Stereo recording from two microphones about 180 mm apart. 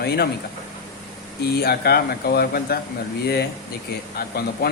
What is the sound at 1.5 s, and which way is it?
Speech, 60° left (ahead or behind).